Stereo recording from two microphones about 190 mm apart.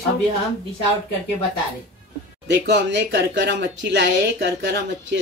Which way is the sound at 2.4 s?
65° right (ahead or behind).